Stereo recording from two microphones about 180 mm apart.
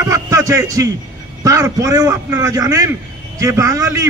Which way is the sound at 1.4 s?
20° right (ahead or behind).